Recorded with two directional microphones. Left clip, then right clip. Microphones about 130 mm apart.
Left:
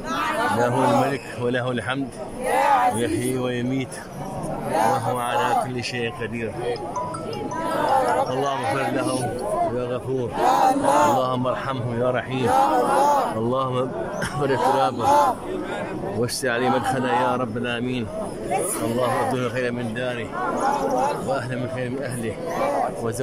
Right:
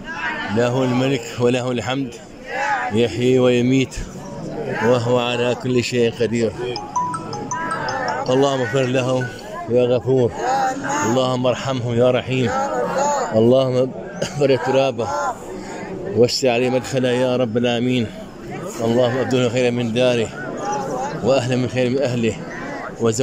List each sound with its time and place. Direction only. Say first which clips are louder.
0.6 s speech: right 2 dB; 15° right (ahead or behind)
2.5 s music: left 3 dB; 35° left (ahead or behind)
3.0 s speech: right 8 dB; 20° right (ahead or behind)
5.1 s speech: right 2 dB; 30° right (ahead or behind)
8.3 s speech: right 6 dB; 25° right (ahead or behind)
10.4 s music: left 2 dB; 25° left (ahead or behind)
11.1 s speech: right 4 dB; 15° right (ahead or behind)
12.4 s a sound: left 2 dB; 20° left (ahead or behind)
13.4 s speech: right 9 dB; 20° right (ahead or behind)
13.7 s a man's voice: right 4 dB; 10° right (ahead or behind)
19.3 s speech: right 7 dB; 20° right (ahead or behind)
21.3 s speech: right 8 dB; 25° right (ahead or behind)